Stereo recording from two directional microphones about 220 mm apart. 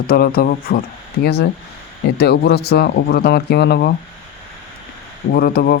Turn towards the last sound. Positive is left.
turn(degrees=45)  # may be behind; listen again after turning